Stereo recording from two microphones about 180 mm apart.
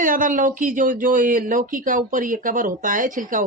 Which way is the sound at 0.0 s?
50° right (ahead or behind).